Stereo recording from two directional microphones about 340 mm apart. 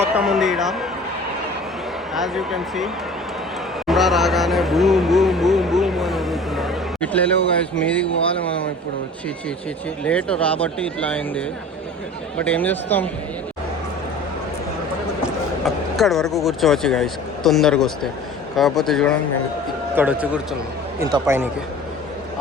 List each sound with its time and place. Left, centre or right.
0.2 s speech: centre
2.1 s speech: centre
8.2 s speech: centre
10.0 s speech: centre
15.6 s speech: centre